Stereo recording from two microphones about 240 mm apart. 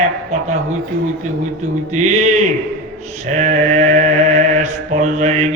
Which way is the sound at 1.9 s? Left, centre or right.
Right.